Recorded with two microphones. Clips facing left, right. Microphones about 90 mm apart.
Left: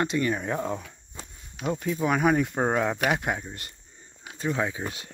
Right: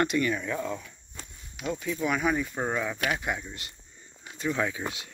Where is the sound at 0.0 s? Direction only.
30° left (ahead or behind).